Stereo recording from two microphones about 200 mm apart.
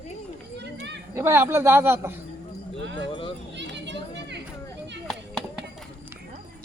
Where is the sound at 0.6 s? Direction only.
60° right (ahead or behind).